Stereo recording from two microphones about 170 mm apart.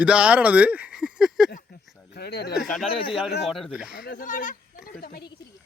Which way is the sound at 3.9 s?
85° left.